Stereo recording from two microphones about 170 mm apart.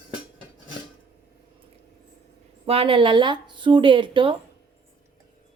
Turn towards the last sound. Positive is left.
turn(degrees=-30)  # may be behind; listen again after turning